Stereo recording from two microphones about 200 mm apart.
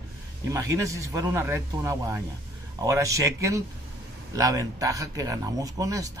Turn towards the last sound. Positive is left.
turn(degrees=-15)  # may be behind; listen again after turning